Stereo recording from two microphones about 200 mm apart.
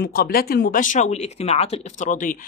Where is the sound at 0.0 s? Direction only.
50° left (ahead or behind).